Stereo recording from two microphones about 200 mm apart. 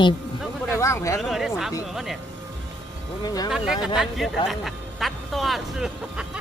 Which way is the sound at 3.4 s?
5° right (ahead or behind).